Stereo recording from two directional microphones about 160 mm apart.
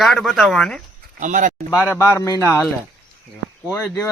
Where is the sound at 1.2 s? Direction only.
50° right (ahead or behind).